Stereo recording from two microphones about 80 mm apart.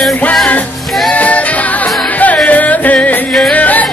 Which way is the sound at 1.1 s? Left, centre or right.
Centre.